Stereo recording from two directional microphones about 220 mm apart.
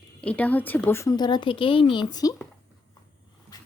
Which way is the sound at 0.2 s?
5° left (ahead or behind).